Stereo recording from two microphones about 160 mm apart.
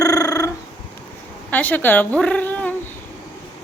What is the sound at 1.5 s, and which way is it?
Speech, 10° left (ahead or behind).